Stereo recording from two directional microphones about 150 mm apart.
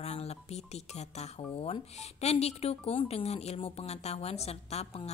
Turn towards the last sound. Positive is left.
turn(degrees=45)  # may be behind; listen again after turning